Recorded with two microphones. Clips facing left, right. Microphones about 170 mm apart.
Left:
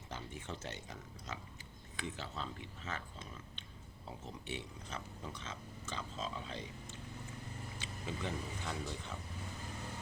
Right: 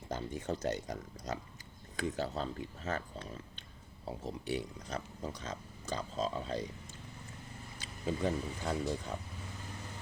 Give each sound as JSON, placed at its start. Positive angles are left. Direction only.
{"t": 0.1, "sound": "speech", "side_deg": -40}
{"t": 4.2, "sound": "speech", "side_deg": -40}
{"t": 7.8, "sound": "speech", "side_deg": -40}